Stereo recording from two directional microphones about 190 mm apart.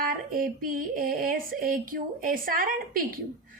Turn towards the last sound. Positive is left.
turn(degrees=-50)  # may be behind; listen again after turning